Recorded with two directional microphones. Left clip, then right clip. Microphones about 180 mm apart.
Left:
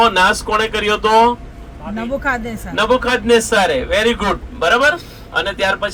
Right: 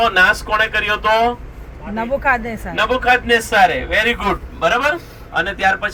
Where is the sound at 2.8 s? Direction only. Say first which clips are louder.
Even; 45° left (ahead or behind).